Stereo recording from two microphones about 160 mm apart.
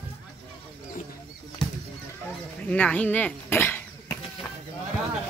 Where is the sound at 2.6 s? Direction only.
10° left (ahead or behind).